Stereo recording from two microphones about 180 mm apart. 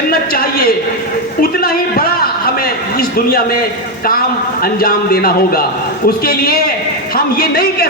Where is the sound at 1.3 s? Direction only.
55° left (ahead or behind).